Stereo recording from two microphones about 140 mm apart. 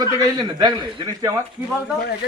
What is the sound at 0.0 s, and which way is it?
Speech, 30° right (ahead or behind).